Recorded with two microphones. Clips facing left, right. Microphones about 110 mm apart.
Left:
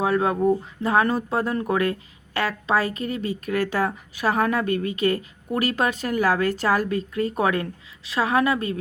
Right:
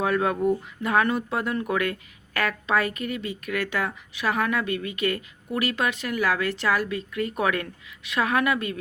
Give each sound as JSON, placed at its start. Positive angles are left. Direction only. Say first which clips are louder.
{"t": 0.0, "sound": "speech", "louder": "left 2 dB", "side_deg": 25}